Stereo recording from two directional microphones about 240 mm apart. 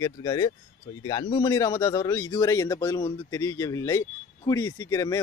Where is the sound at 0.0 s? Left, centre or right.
Centre.